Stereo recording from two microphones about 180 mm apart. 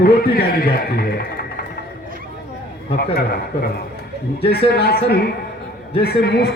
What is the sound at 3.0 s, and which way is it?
Speech, 60° left (ahead or behind).